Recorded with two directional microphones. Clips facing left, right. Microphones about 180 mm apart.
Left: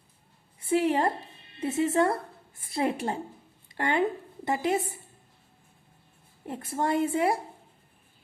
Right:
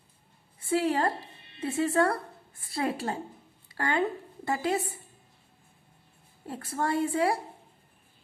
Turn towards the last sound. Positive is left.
turn(degrees=20)  # may be behind; listen again after turning